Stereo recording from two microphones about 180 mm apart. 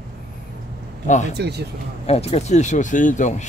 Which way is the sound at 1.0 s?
45° left (ahead or behind).